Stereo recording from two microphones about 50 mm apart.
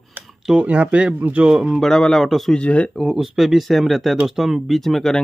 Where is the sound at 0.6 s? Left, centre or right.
Right.